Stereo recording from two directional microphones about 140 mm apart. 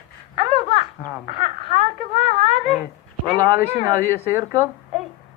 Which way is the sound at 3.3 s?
20° right (ahead or behind).